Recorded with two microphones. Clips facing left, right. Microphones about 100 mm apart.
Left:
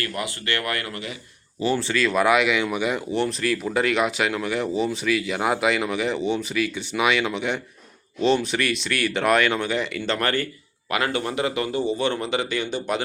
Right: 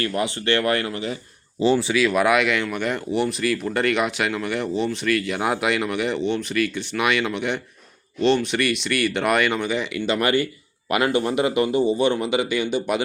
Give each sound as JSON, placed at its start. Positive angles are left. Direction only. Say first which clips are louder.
{"t": 0.0, "sound": "speech", "louder": "right 5 dB", "side_deg": -25}
{"t": 1.9, "sound": "speech", "louder": "right 1 dB", "side_deg": -5}